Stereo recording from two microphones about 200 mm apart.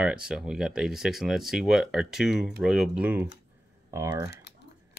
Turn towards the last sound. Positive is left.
turn(degrees=-15)  # may be behind; listen again after turning